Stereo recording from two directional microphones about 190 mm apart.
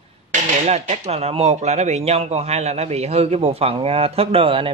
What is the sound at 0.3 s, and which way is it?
Speech, 35° right (ahead or behind).